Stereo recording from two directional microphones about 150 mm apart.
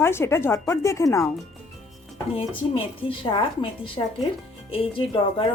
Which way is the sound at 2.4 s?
35° left (ahead or behind).